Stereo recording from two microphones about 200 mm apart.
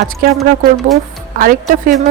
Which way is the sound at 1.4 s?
40° right (ahead or behind).